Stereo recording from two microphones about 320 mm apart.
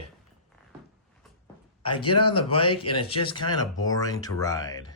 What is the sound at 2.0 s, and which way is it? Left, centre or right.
Speech, centre.